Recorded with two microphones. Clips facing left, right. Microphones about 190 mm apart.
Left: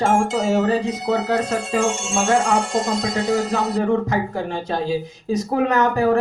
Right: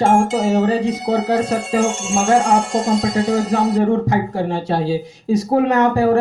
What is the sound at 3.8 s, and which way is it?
Speech, 30° right (ahead or behind).